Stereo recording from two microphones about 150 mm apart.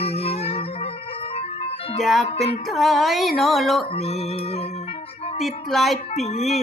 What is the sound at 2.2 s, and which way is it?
Speech, 40° left (ahead or behind).